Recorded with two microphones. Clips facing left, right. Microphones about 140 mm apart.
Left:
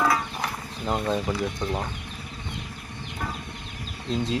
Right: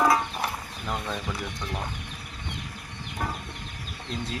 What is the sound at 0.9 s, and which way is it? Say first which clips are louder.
Speech: left 6 dB; 30° left (ahead or behind).